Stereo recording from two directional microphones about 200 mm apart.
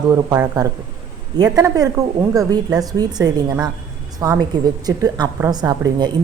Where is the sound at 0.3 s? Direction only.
15° right (ahead or behind).